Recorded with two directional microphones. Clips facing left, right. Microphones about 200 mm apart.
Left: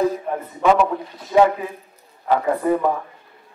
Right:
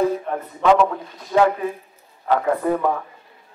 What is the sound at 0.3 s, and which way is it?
A man's voice, 10° left (ahead or behind).